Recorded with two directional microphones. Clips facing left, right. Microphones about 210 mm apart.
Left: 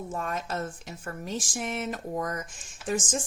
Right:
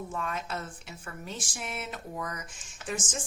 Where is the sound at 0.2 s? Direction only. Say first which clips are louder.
Left 4 dB; 40° left (ahead or behind).